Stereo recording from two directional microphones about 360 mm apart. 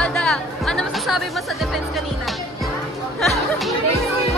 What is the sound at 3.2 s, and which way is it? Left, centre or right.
Music, centre.